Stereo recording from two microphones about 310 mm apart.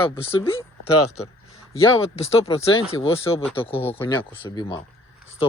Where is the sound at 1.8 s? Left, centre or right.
Centre.